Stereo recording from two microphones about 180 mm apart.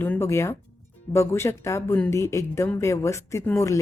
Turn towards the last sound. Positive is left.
turn(degrees=15)  # may be behind; listen again after turning